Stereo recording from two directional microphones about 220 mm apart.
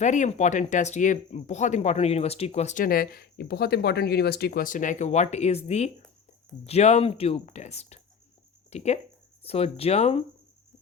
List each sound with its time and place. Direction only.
0.0 s speech: 35° left (ahead or behind)